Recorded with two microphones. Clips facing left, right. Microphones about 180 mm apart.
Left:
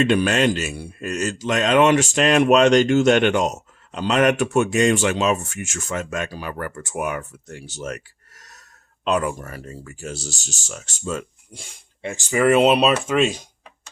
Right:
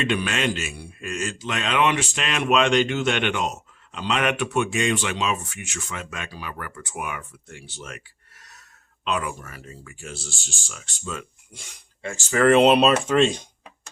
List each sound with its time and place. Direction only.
0.0 s a man's voice: 40° left (ahead or behind)
12.1 s speech: 15° left (ahead or behind)